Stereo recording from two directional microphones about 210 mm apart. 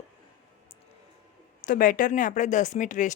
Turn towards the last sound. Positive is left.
turn(degrees=35)  # may be behind; listen again after turning